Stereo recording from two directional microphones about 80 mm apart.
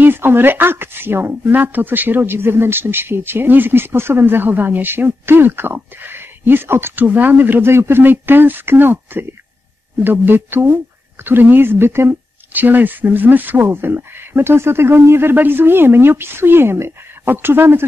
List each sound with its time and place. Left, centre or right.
0.0 s speech: right